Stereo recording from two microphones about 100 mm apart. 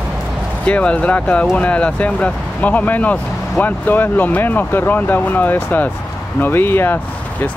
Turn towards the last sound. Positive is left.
turn(degrees=20)  # may be behind; listen again after turning